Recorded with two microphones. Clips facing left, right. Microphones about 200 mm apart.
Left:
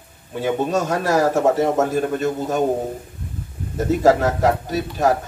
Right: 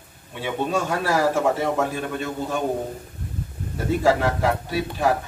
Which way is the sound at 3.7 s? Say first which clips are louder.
Left 4 dB; 40° left (ahead or behind).